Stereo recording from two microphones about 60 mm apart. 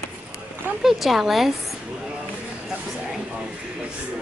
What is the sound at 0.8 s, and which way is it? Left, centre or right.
Speech, centre.